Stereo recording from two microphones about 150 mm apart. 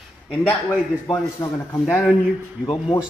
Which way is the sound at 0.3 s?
10° left (ahead or behind).